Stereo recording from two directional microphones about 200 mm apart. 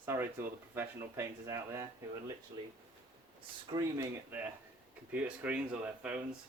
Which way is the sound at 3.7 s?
15° right (ahead or behind).